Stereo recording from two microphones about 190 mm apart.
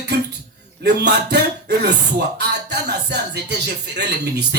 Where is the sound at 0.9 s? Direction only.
60° right (ahead or behind).